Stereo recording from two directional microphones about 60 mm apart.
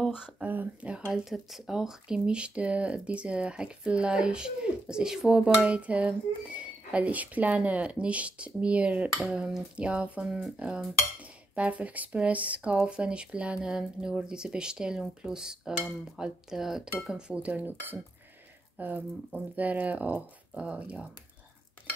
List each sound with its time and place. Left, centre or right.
0.5 s speech: right; by 5.4 s centre
5.4 s speech: right
17.4 s speech: right